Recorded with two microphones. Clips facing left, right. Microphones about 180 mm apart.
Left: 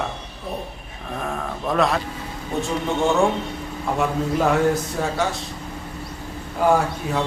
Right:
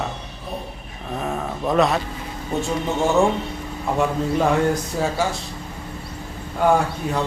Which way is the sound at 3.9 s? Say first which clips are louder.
Right 1 dB; centre (ahead or behind).